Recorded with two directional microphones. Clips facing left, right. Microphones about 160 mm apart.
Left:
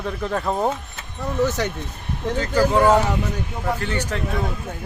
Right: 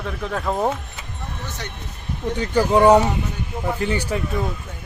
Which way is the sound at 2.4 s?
15° right (ahead or behind).